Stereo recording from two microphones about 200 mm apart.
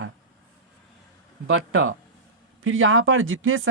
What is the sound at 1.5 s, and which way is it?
Speech, 80° right.